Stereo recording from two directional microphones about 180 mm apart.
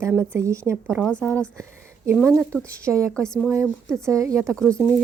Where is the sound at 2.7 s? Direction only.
15° right (ahead or behind).